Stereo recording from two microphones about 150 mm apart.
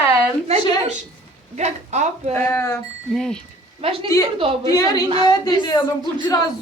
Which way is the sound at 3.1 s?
5° left (ahead or behind).